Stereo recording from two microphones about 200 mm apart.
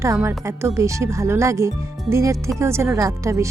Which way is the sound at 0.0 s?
15° right (ahead or behind).